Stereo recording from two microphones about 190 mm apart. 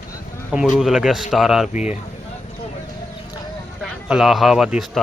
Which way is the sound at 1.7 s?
40° left (ahead or behind).